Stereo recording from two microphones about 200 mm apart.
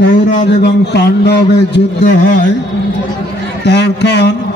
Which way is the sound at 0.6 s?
55° left (ahead or behind).